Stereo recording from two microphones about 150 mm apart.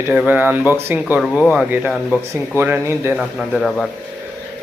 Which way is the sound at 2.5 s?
15° right (ahead or behind).